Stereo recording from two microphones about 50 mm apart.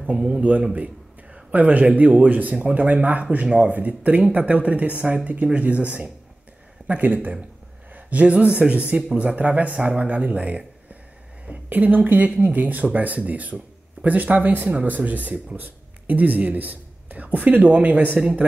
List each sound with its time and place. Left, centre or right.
0.4 s a woman's voice: right